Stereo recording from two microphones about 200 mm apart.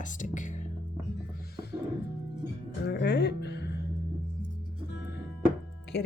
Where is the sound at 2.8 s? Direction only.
55° left (ahead or behind).